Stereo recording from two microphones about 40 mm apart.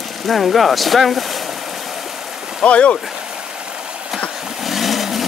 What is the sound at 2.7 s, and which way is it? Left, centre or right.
Speech, left.